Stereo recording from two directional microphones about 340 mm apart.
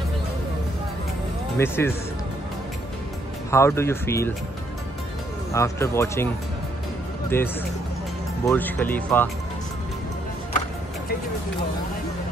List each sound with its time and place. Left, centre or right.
1.6 s speech: centre
3.4 s speech: centre
5.5 s speech: centre
7.3 s speech: centre